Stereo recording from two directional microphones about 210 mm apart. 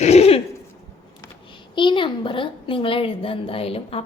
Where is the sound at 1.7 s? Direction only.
25° left (ahead or behind).